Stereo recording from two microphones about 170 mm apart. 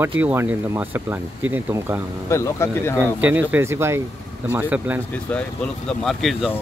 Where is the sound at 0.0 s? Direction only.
10° right (ahead or behind).